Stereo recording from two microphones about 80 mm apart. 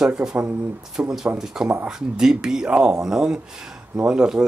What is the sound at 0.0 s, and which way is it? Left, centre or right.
Speech, centre.